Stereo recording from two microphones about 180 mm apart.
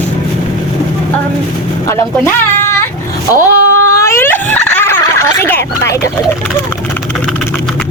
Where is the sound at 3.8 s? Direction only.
15° left (ahead or behind).